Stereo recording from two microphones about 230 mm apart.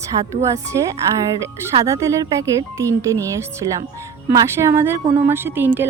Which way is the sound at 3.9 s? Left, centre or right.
Centre.